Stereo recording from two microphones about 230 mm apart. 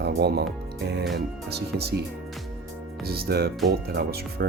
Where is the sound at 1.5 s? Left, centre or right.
Right.